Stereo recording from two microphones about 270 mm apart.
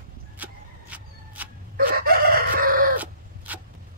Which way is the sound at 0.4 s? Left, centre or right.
Centre.